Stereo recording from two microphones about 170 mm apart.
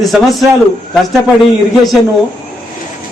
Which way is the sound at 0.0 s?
Centre (ahead or behind).